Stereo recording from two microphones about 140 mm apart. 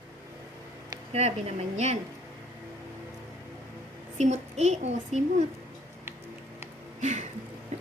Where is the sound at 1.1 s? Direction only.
50° right (ahead or behind).